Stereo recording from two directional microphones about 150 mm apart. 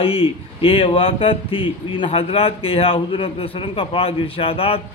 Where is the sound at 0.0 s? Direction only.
40° left (ahead or behind).